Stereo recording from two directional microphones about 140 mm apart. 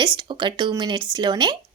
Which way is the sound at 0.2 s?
35° right (ahead or behind).